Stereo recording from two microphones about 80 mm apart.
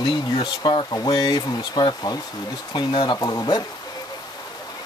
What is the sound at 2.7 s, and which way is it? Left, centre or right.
Speech, left.